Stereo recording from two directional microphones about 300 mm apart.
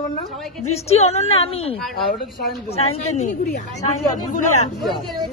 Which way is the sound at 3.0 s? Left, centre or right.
Left.